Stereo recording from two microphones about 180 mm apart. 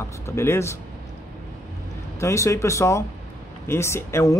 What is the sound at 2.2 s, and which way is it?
Speech, 15° left (ahead or behind).